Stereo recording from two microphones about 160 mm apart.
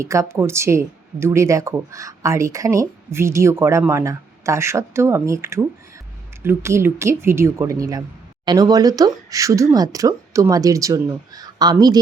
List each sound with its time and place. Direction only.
0.0 s speech: 20° right (ahead or behind)